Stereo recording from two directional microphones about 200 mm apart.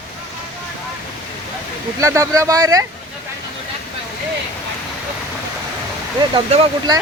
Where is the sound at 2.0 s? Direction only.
15° right (ahead or behind).